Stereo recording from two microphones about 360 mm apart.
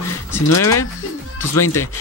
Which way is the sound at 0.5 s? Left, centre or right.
Left.